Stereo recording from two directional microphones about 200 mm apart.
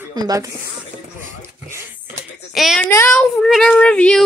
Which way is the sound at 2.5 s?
Centre (ahead or behind).